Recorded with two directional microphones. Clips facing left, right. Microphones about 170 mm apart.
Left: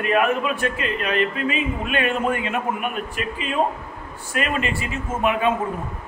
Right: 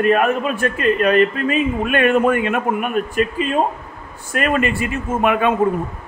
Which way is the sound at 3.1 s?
45° right (ahead or behind).